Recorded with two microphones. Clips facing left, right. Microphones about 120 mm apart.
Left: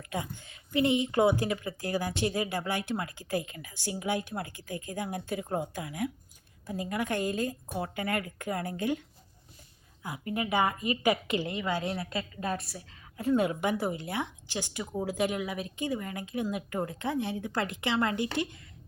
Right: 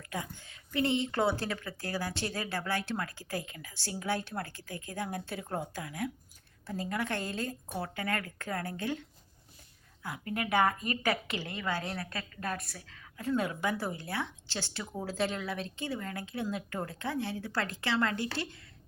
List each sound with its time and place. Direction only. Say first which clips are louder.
0.1 s a woman's voice: left 3 dB; 20° left (ahead or behind)
10.3 s a woman's voice: even; 10° left (ahead or behind)